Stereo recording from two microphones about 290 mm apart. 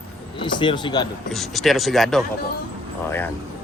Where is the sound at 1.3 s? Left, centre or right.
Centre.